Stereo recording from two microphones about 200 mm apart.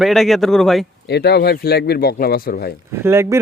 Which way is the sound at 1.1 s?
55° left (ahead or behind).